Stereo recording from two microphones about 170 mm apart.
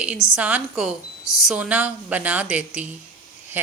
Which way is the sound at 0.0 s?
5° right (ahead or behind).